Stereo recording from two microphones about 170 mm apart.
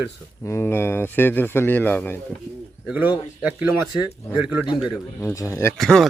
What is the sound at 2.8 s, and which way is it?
Speech, 10° right (ahead or behind).